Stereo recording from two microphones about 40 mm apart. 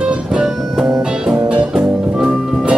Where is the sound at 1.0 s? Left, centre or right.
Right.